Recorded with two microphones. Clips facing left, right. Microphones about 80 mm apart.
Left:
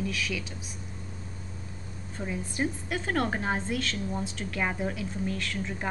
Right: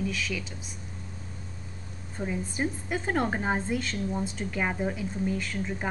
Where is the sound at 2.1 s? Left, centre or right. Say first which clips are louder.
Right 2 dB; centre.